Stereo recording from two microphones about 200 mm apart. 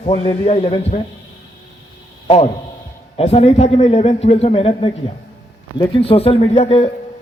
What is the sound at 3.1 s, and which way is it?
A man's voice, 30° left (ahead or behind).